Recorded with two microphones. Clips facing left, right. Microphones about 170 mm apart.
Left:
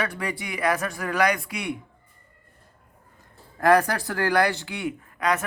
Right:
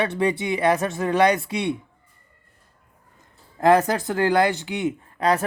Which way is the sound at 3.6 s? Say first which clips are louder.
Right 2 dB; 20° right (ahead or behind).